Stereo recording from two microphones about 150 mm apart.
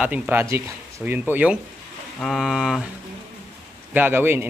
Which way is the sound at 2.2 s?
Centre (ahead or behind).